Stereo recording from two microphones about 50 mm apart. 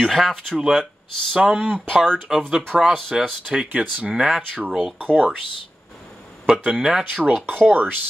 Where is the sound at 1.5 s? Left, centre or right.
Right.